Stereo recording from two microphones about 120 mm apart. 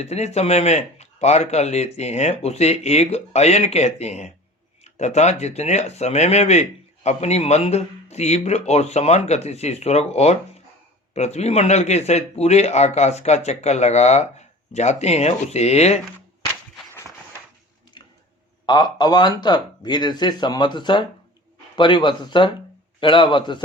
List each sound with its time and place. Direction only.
0.0 s speech: 65° left (ahead or behind)
18.6 s speech: 35° left (ahead or behind)